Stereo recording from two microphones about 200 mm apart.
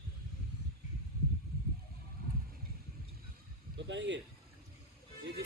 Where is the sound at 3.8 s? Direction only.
65° right (ahead or behind).